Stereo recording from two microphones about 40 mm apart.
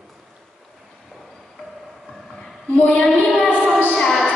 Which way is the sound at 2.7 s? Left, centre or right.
Left.